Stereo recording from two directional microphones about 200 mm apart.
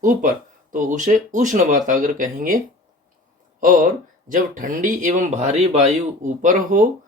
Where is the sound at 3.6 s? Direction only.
40° right (ahead or behind).